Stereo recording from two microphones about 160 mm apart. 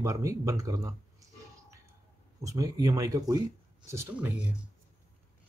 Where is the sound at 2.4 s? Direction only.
20° right (ahead or behind).